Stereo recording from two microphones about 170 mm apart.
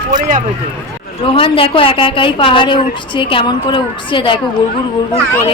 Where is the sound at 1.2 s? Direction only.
30° left (ahead or behind).